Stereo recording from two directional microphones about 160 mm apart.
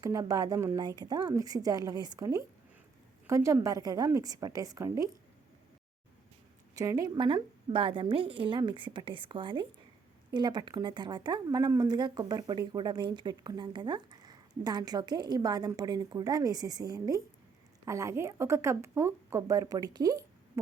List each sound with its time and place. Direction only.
0.0 s speech: 20° right (ahead or behind)
6.7 s a woman's voice: 20° right (ahead or behind)